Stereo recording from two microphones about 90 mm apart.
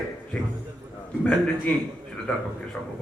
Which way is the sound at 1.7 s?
15° left (ahead or behind).